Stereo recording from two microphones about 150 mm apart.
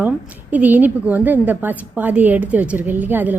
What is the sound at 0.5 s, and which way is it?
A woman's voice, 10° right (ahead or behind).